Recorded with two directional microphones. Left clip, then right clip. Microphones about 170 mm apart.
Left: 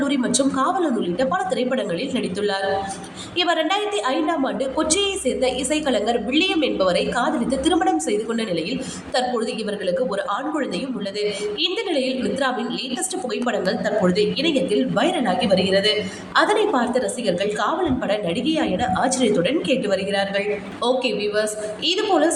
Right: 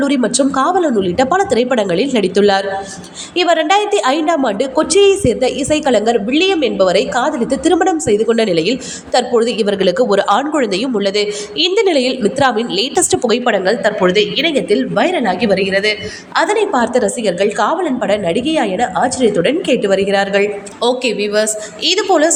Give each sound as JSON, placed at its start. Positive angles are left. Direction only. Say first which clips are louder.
{"t": 0.0, "sound": "a woman's voice", "louder": "right 7 dB", "side_deg": -35}
{"t": 13.4, "sound": "a woman's voice", "louder": "right 9 dB", "side_deg": -35}
{"t": 16.7, "sound": "a woman's voice", "louder": "right 7 dB", "side_deg": -40}
{"t": 20.8, "sound": "a woman's voice", "louder": "right 6 dB", "side_deg": -30}